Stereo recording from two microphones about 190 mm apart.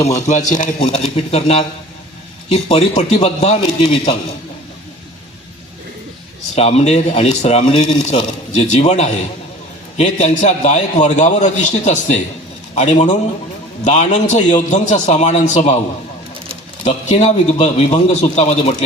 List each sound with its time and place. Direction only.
0.0 s a man's voice: 40° left (ahead or behind)
6.6 s a man's voice: 35° left (ahead or behind)
16.8 s a man's voice: 35° left (ahead or behind)